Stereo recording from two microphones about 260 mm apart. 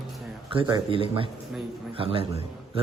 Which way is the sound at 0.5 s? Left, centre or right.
Centre.